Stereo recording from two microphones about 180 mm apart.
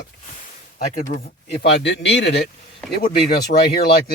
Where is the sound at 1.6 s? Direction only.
75° left (ahead or behind).